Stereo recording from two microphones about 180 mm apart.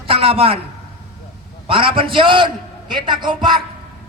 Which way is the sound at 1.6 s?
30° right (ahead or behind).